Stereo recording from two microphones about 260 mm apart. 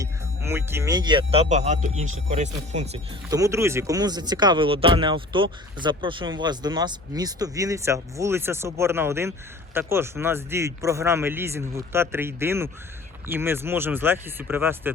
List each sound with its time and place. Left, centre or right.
0.0 s speech: centre; by 3.0 s right
3.2 s speech: centre